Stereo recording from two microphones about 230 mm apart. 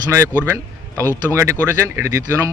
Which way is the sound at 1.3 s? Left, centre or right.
Centre.